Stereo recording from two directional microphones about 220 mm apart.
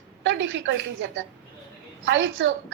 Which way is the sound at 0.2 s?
55° right (ahead or behind).